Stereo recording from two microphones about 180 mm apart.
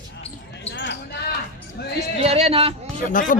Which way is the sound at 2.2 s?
35° right (ahead or behind).